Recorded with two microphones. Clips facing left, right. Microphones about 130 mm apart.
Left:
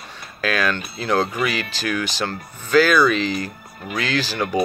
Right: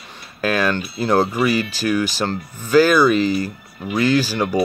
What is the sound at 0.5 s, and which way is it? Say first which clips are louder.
Speech: right 3 dB; 15° right (ahead or behind).